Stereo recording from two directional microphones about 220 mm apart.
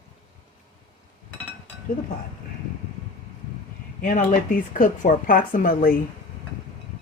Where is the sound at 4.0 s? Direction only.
35° left (ahead or behind).